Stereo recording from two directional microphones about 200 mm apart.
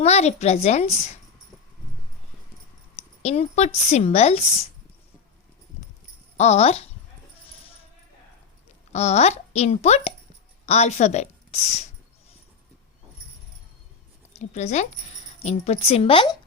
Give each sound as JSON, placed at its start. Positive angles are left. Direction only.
{"t": 0.0, "sound": "speech", "side_deg": 35}
{"t": 3.2, "sound": "speech", "side_deg": 35}
{"t": 6.3, "sound": "speech", "side_deg": 35}
{"t": 8.9, "sound": "a woman's voice", "side_deg": 35}
{"t": 14.3, "sound": "a woman's voice", "side_deg": 35}